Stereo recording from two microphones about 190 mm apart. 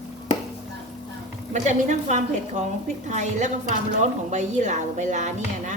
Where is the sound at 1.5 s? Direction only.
40° right (ahead or behind).